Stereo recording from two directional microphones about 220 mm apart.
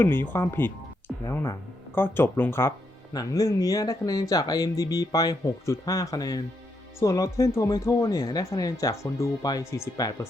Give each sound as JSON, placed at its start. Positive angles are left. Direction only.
{"t": 0.0, "sound": "speech", "side_deg": 10}